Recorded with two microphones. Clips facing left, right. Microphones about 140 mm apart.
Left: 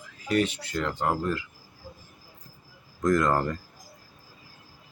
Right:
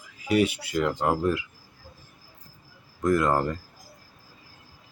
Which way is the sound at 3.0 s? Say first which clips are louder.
Right 1 dB; 10° right (ahead or behind).